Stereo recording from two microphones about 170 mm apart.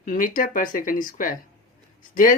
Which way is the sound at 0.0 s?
50° left (ahead or behind).